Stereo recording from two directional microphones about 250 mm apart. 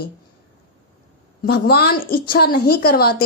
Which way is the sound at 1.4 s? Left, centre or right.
Left.